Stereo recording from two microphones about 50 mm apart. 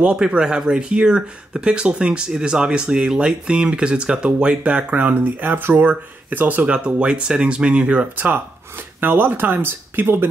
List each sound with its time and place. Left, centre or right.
0.0 s speech: centre
5.0 s speech: right
8.2 s speech: right